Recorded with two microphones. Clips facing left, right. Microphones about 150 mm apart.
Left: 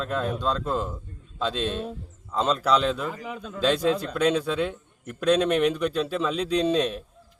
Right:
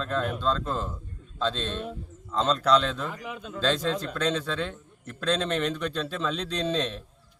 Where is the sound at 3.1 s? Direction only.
40° left (ahead or behind).